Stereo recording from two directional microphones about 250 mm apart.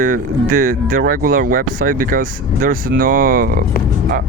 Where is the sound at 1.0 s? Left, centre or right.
Right.